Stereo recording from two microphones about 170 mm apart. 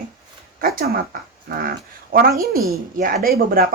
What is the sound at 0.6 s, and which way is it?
Speech, 60° right (ahead or behind).